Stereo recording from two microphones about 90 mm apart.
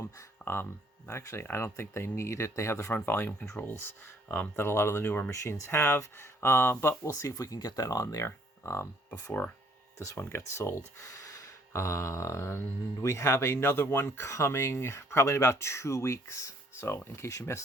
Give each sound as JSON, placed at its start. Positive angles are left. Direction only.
{"t": 0.2, "sound": "speech", "side_deg": 25}
{"t": 10.2, "sound": "speech", "side_deg": 25}